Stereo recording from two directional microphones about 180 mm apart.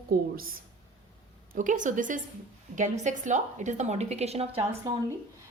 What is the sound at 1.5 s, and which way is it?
A woman's voice, 45° right (ahead or behind).